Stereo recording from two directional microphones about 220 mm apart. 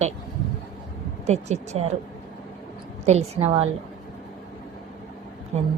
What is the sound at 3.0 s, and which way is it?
Speech, 30° right (ahead or behind).